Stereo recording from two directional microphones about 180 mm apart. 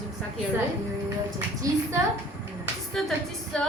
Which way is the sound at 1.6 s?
20° right (ahead or behind).